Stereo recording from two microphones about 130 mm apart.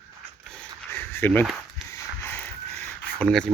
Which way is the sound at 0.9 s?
15° left (ahead or behind).